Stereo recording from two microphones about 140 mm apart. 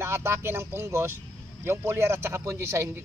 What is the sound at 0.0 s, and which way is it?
A man's voice, 20° right (ahead or behind).